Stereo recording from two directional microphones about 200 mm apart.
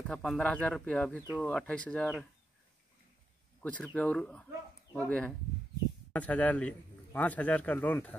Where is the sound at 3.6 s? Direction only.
5° left (ahead or behind).